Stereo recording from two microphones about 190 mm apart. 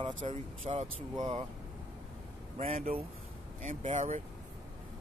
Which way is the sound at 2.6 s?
35° right (ahead or behind).